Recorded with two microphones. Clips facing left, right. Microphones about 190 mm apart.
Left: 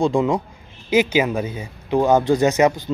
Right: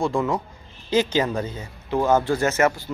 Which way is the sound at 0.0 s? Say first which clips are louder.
Left 5 dB; 15° left (ahead or behind).